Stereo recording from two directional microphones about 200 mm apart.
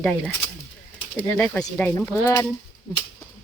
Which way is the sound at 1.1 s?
5° left (ahead or behind).